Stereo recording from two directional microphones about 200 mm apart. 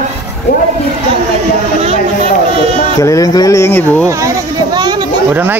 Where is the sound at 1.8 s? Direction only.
30° right (ahead or behind).